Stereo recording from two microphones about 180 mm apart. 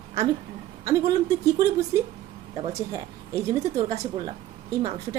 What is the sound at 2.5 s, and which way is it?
Speech, 30° right (ahead or behind).